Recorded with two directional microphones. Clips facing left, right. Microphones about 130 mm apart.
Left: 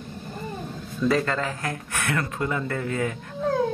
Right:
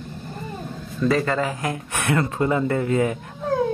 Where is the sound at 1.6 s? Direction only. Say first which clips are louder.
Right 4 dB; 20° right (ahead or behind).